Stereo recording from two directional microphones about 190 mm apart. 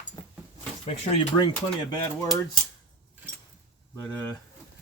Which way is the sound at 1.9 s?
20° left (ahead or behind).